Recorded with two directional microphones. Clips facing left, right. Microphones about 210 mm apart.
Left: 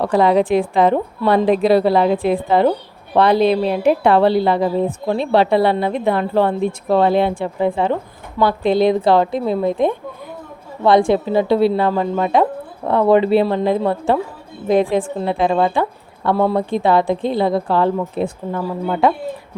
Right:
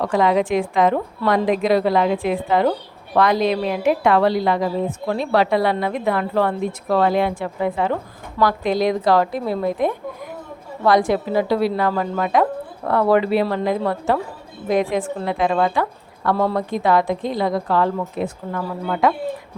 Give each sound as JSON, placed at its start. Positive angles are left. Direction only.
{"t": 0.0, "sound": "a woman's voice", "side_deg": 35}
{"t": 16.3, "sound": "speech", "side_deg": 15}
{"t": 16.6, "sound": "a woman's voice", "side_deg": 30}